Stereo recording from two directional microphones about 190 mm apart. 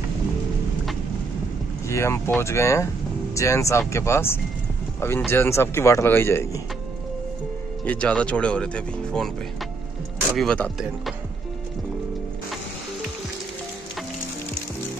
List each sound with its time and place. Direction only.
1.9 s speech: 15° left (ahead or behind)
7.8 s speech: 5° left (ahead or behind)
10.3 s speech: 5° left (ahead or behind)